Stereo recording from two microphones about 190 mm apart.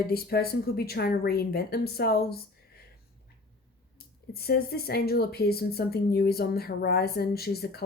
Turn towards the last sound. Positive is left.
turn(degrees=55)  # may be behind; listen again after turning